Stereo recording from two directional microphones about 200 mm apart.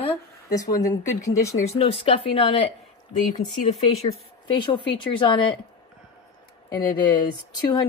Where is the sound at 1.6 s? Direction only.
30° left (ahead or behind).